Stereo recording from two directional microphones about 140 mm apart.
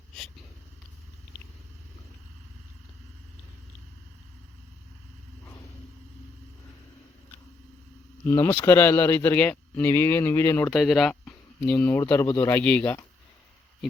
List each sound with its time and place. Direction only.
8.3 s speech: 10° left (ahead or behind)
10.7 s speech: centre (ahead or behind)